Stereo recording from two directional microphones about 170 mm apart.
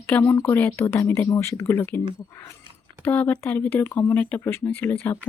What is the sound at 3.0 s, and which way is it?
Speech, 10° left (ahead or behind).